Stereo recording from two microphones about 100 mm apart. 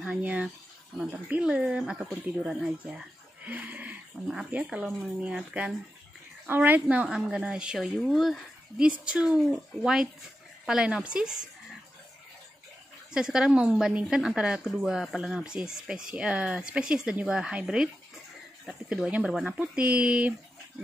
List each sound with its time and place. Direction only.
0.0 s speech: 15° right (ahead or behind)
3.4 s a sound: 15° right (ahead or behind)
4.7 s a woman's voice: 10° right (ahead or behind)
13.1 s speech: 5° right (ahead or behind)